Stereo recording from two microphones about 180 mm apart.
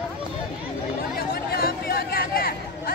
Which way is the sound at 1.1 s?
60° left (ahead or behind).